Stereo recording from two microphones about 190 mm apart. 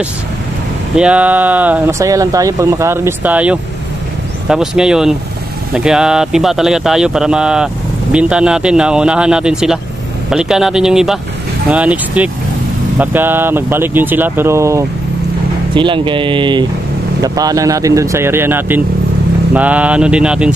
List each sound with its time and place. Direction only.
0.9 s speech: 5° right (ahead or behind)
15.7 s speech: 25° right (ahead or behind); by 20.5 s 5° right (ahead or behind)